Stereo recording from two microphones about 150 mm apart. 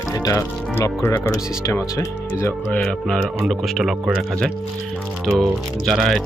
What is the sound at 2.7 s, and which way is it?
Speech, 5° left (ahead or behind).